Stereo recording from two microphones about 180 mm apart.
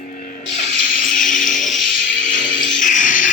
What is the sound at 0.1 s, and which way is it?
Spray, 50° left (ahead or behind).